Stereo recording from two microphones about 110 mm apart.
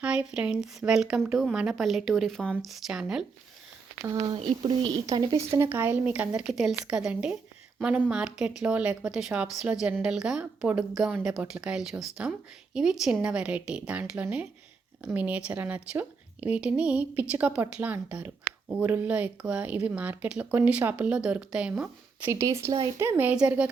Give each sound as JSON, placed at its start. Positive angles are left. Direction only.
{"t": 0.0, "sound": "a woman's voice", "side_deg": -10}
{"t": 4.0, "sound": "speech", "side_deg": -35}
{"t": 4.4, "sound": "speech", "side_deg": -45}
{"t": 5.5, "sound": "speech", "side_deg": -25}
{"t": 22.4, "sound": "speech", "side_deg": -30}